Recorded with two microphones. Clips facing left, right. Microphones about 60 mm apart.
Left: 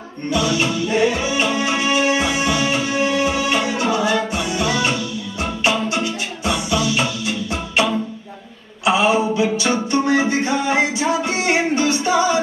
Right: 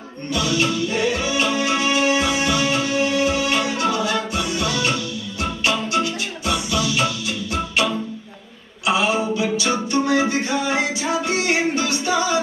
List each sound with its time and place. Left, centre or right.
0.3 s music: left